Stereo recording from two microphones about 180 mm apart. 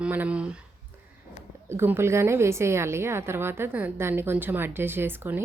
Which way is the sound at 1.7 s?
15° right (ahead or behind).